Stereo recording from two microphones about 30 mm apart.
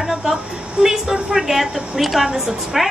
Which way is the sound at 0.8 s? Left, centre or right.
Centre.